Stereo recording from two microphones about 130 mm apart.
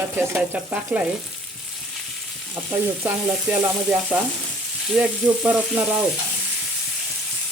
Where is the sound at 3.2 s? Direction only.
5° right (ahead or behind).